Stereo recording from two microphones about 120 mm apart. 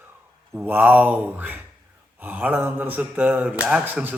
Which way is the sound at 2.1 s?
15° right (ahead or behind).